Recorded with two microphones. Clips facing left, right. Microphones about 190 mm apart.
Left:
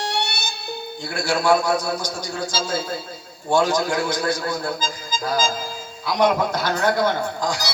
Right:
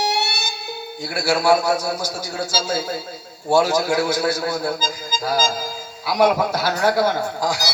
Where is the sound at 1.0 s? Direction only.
5° right (ahead or behind).